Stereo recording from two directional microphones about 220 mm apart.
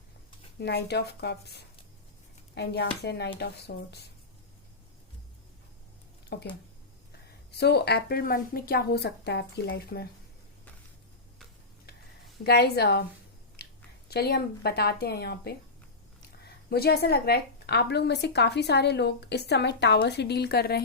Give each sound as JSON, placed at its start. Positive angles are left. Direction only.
{"t": 0.6, "sound": "a woman's voice", "side_deg": 50}
{"t": 6.3, "sound": "a woman's voice", "side_deg": 50}
{"t": 7.6, "sound": "a woman's voice", "side_deg": 50}
{"t": 12.4, "sound": "a woman's voice", "side_deg": 45}
{"t": 13.6, "sound": "chewing", "side_deg": 45}
{"t": 14.1, "sound": "a woman's voice", "side_deg": 45}
{"t": 16.6, "sound": "a woman's voice", "side_deg": 45}